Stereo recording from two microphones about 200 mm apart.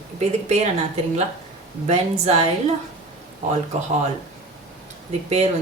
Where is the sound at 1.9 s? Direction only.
30° right (ahead or behind).